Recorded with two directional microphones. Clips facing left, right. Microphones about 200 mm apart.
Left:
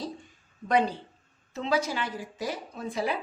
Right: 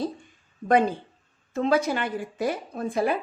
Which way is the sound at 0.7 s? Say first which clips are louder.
Right 4 dB; 50° right (ahead or behind).